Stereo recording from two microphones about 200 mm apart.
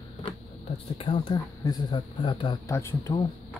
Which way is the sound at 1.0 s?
25° left (ahead or behind).